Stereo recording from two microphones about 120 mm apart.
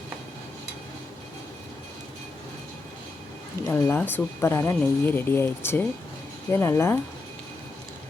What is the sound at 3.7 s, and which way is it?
Speech, 20° left (ahead or behind).